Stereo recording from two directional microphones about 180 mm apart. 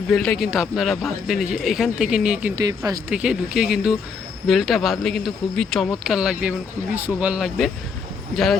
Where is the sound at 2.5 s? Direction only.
20° right (ahead or behind).